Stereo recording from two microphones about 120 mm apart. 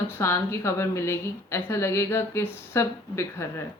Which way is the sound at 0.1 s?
20° left (ahead or behind).